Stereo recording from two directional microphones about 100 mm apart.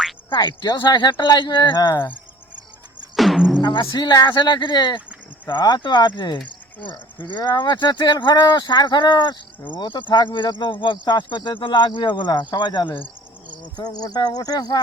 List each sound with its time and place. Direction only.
0.3 s speech: 50° left (ahead or behind)
3.2 s music: centre (ahead or behind)
3.6 s speech: 50° left (ahead or behind)